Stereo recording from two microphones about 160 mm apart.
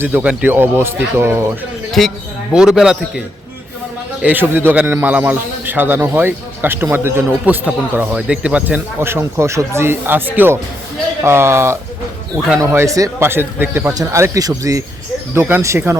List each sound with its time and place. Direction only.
0.0 s speech: 10° right (ahead or behind)
1.9 s a man's voice: centre (ahead or behind); by 16.0 s 15° right (ahead or behind)